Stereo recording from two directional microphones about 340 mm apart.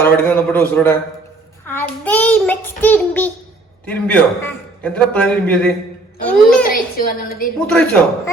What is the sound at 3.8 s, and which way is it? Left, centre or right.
A child's voice, centre.